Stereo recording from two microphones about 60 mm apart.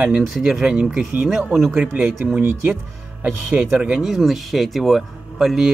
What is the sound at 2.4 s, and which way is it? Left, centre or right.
Speech, right.